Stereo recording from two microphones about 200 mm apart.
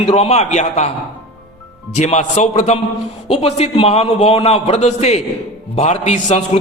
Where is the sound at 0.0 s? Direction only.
30° left (ahead or behind).